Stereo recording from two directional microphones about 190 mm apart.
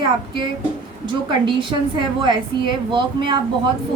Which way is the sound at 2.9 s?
25° right (ahead or behind).